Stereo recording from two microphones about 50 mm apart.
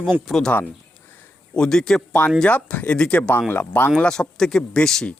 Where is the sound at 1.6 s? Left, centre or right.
Centre.